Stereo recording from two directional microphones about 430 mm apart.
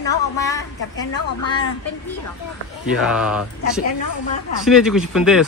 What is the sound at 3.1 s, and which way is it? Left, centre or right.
Speech, centre.